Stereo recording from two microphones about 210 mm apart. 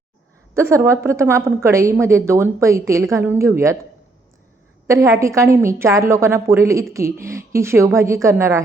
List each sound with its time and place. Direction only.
0.5 s a woman's voice: 15° right (ahead or behind)
4.9 s a woman's voice: 15° right (ahead or behind)